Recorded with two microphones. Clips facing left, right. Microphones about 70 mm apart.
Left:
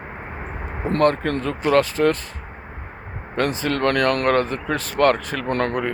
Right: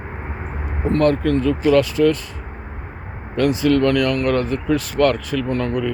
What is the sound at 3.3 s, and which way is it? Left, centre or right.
Speech, left.